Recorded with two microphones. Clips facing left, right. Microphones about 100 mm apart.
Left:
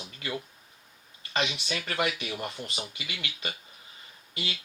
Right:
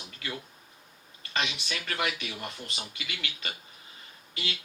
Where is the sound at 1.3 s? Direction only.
25° left (ahead or behind).